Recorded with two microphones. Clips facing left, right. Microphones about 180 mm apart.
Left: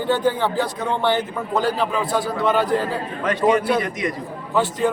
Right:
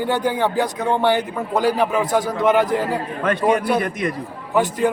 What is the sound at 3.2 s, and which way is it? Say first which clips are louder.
Speech: left 1 dB; 55° right (ahead or behind).